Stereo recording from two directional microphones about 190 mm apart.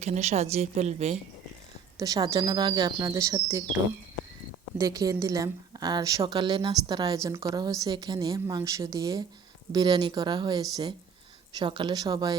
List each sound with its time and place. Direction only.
0.0 s speech: 35° right (ahead or behind)
2.0 s a woman's voice: 20° right (ahead or behind)
4.8 s a woman's voice: 20° right (ahead or behind)